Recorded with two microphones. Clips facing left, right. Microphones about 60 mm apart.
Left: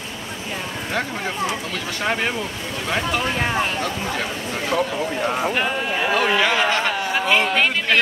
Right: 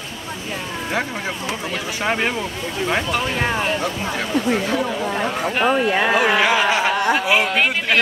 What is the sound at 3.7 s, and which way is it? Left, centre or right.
Speech, centre.